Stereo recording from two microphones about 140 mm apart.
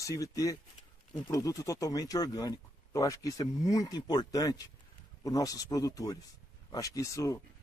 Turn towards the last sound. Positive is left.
turn(degrees=25)  # may be behind; listen again after turning